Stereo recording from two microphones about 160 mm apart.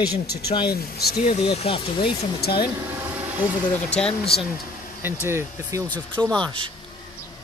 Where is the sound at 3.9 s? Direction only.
5° left (ahead or behind).